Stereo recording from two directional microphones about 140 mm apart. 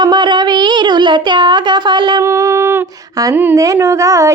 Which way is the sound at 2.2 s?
20° right (ahead or behind).